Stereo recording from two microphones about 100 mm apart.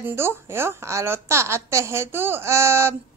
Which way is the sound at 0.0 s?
25° right (ahead or behind).